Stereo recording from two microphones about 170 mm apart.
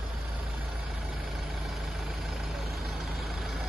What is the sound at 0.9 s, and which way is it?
Vehicle, centre (ahead or behind).